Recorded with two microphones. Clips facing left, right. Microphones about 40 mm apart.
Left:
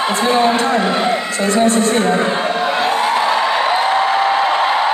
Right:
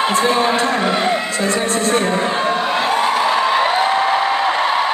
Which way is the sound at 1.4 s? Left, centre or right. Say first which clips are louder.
Left 8 dB; centre.